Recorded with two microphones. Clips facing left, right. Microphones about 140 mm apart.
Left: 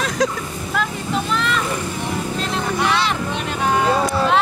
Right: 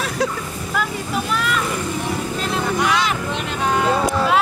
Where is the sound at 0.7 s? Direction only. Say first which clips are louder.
Left 1 dB; 5° right (ahead or behind).